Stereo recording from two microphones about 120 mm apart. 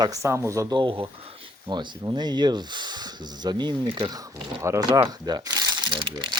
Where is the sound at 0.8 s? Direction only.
45° right (ahead or behind).